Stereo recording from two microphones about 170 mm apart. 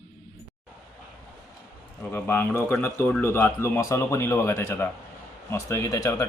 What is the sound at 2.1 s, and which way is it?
A man's voice, 10° left (ahead or behind).